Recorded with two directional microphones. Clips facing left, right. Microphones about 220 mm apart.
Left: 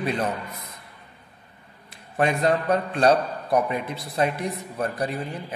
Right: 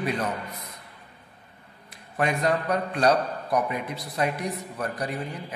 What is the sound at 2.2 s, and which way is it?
A man's voice, 25° left (ahead or behind).